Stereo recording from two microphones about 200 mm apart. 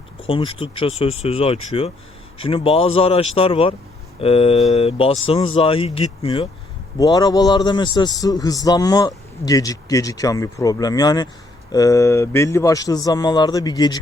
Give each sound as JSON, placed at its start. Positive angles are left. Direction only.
{"t": 0.2, "sound": "a man's voice", "side_deg": 25}